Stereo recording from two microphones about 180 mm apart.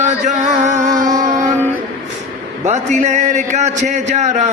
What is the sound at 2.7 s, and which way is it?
A man's voice, 40° right (ahead or behind).